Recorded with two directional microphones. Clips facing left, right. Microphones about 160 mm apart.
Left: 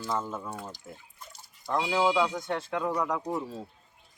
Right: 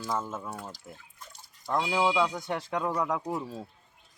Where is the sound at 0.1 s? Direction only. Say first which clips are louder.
Left 1 dB; 5° right (ahead or behind).